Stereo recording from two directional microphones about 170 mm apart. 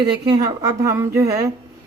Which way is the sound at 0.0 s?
25° right (ahead or behind).